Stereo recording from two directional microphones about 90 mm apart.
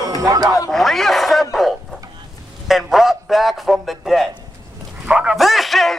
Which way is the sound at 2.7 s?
5° right (ahead or behind).